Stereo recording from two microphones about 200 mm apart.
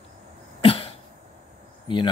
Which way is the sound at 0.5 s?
25° left (ahead or behind).